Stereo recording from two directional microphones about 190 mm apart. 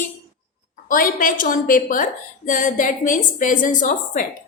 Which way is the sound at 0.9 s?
45° left (ahead or behind).